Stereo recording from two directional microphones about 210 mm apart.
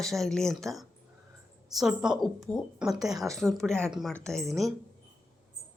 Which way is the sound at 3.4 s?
Centre (ahead or behind).